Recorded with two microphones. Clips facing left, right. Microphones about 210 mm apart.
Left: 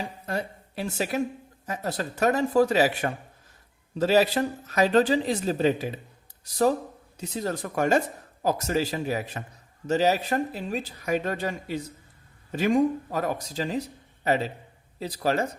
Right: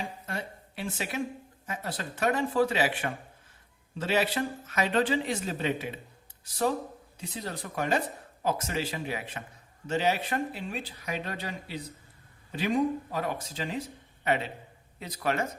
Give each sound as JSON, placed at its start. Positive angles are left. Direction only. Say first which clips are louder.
{"t": 0.3, "sound": "speech", "louder": "left 6 dB", "side_deg": 40}